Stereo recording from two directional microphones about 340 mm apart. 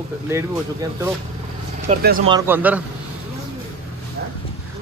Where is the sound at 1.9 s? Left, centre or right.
Right.